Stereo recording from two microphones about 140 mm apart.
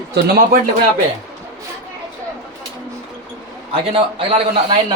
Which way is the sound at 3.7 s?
40° right (ahead or behind).